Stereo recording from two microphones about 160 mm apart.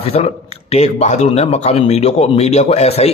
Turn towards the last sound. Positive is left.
turn(degrees=40)  # may be behind; listen again after turning